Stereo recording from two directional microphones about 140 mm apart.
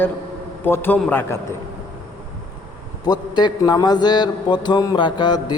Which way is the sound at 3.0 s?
30° left (ahead or behind).